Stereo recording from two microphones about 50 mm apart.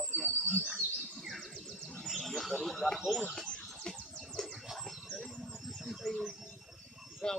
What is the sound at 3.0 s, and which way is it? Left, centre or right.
Bird, centre.